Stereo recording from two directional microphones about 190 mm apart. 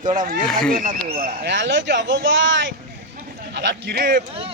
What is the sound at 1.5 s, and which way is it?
Speech, 70° right (ahead or behind).